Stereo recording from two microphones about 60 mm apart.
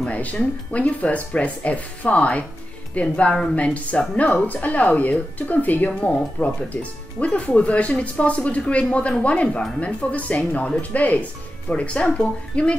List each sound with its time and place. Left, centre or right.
0.0 s speech: left